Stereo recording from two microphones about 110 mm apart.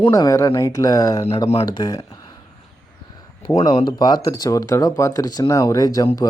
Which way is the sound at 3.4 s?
40° left (ahead or behind).